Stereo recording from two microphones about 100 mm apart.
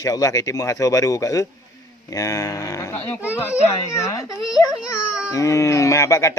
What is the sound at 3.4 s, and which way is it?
Speech, 25° left (ahead or behind).